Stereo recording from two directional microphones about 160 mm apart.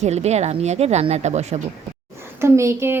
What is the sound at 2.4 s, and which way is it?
Speech, 15° right (ahead or behind).